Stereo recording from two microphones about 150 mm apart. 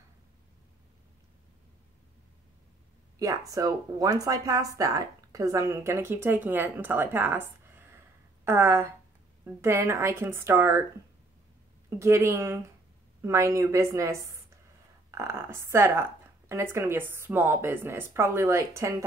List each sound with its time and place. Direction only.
3.2 s speech: 20° right (ahead or behind)
12.0 s a woman's voice: 20° right (ahead or behind)